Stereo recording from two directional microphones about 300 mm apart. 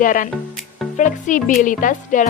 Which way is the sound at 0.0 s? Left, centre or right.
Left.